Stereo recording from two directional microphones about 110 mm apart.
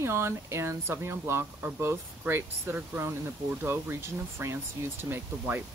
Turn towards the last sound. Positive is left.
turn(degrees=-20)  # may be behind; listen again after turning